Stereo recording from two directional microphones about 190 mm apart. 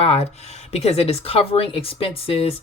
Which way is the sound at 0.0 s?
30° left (ahead or behind).